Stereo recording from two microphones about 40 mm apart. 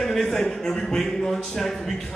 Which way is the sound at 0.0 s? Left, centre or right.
Centre.